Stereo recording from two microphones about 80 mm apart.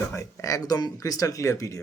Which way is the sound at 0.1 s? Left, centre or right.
Left.